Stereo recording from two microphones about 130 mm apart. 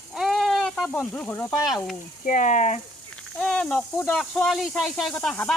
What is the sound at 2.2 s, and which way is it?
Speech, 80° left.